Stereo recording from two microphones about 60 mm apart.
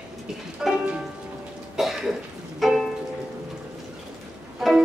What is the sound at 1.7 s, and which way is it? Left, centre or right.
Cough, centre.